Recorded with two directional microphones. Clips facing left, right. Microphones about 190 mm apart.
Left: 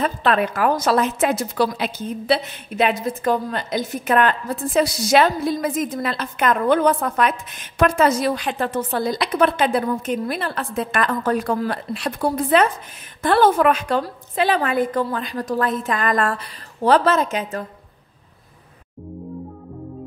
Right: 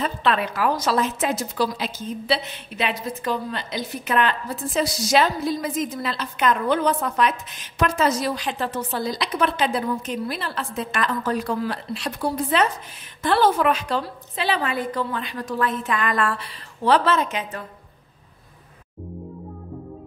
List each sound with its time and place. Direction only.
0.0 s a woman's voice: 50° left (ahead or behind)